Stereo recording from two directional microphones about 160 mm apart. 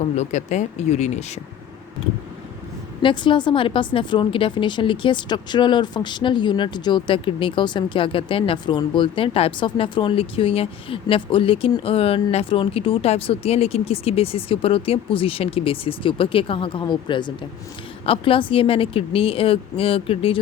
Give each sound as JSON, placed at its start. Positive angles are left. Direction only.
{"t": 0.0, "sound": "speech", "side_deg": 45}
{"t": 3.0, "sound": "a woman's voice", "side_deg": 30}